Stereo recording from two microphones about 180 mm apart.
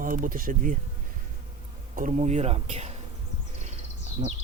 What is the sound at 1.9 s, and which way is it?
Speech, 45° right (ahead or behind).